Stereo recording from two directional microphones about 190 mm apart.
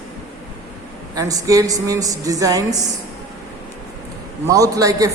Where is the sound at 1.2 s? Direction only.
20° right (ahead or behind).